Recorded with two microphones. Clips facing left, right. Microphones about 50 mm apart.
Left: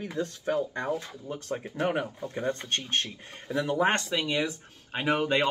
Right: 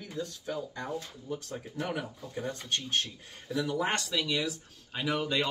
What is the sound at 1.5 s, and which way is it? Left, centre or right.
Speech, left.